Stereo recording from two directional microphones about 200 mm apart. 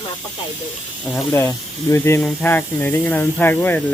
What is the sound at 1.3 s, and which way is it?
Speech, 10° left (ahead or behind).